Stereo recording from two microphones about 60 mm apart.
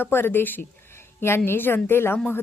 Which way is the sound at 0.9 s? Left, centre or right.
Left.